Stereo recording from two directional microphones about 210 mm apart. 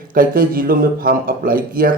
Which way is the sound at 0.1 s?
45° right (ahead or behind).